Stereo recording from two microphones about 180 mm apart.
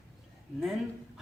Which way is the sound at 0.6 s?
Centre (ahead or behind).